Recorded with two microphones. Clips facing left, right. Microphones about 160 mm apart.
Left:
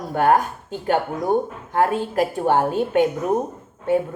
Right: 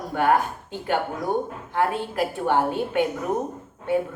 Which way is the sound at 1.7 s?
45° left (ahead or behind).